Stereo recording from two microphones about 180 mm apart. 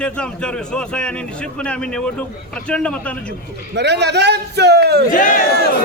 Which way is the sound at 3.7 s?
70° right (ahead or behind).